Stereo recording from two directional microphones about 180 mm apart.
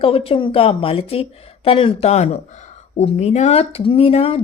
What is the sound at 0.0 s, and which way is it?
Speech, 30° left (ahead or behind).